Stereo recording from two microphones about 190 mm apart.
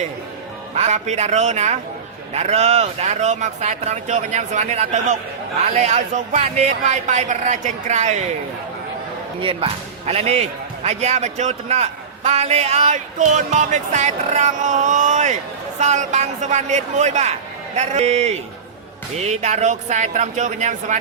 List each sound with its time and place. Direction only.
0.8 s a man's voice: 35° right (ahead or behind)
9.4 s a man's voice: 30° right (ahead or behind)